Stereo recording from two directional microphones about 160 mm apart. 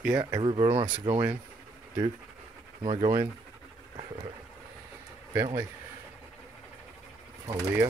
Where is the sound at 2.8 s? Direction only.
35° right (ahead or behind).